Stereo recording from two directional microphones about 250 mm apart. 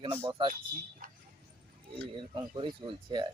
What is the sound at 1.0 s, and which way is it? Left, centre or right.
Vehicle, right.